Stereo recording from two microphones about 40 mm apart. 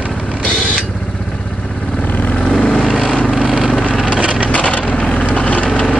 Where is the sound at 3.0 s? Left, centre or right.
Left.